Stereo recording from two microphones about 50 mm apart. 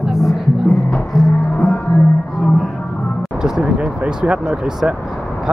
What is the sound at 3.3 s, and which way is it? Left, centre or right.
Speech, centre.